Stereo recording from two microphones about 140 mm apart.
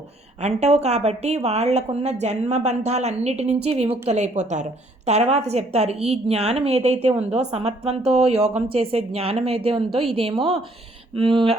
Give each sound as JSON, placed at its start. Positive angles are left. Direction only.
{"t": 0.4, "sound": "a woman's voice", "side_deg": -50}
{"t": 9.9, "sound": "a woman's voice", "side_deg": 0}
{"t": 11.1, "sound": "speech", "side_deg": -40}